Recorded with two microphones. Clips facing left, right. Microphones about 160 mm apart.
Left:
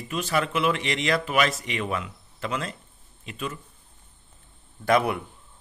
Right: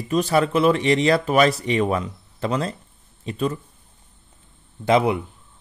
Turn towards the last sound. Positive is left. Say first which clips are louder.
# right 4 dB
turn(degrees=-20)  # may be behind; listen again after turning